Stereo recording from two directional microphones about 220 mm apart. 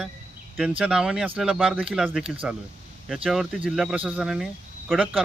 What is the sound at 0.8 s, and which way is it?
Speech, 5° right (ahead or behind).